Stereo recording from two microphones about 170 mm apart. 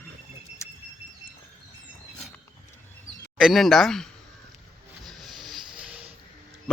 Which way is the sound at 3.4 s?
Centre (ahead or behind).